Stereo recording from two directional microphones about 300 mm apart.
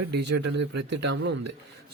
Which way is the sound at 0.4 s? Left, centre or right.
Right.